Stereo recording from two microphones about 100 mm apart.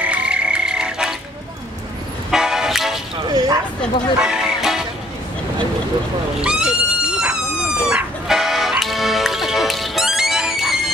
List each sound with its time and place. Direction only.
0.0 s frog: 10° right (ahead or behind)
2.3 s toot: 5° right (ahead or behind)
3.3 s a sound: 40° right (ahead or behind)
4.2 s music: 5° right (ahead or behind)
6.4 s wild animals: 10° right (ahead or behind)
7.9 s music: 5° right (ahead or behind)